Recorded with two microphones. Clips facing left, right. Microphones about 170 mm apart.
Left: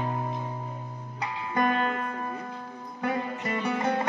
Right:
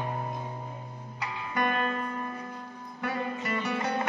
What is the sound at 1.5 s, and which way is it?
Music, 25° left (ahead or behind).